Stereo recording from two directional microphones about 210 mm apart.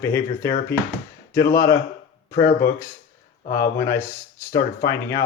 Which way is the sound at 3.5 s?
15° left (ahead or behind).